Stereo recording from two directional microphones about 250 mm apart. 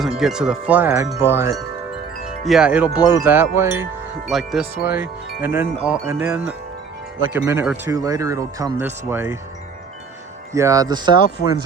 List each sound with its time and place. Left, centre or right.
0.0 s speech: centre
2.4 s chime: centre
3.1 s speech: centre
4.3 s chime: centre
4.9 s speech: centre
10.5 s speech: centre
11.4 s speech: left